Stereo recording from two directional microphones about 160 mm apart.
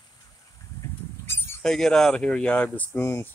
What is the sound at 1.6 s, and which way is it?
Speech, 5° left (ahead or behind).